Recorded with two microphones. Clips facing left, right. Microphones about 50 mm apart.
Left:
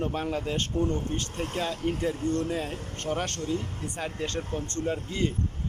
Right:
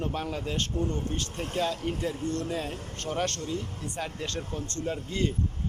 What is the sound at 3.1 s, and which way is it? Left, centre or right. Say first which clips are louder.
Speech: left 1 dB; centre.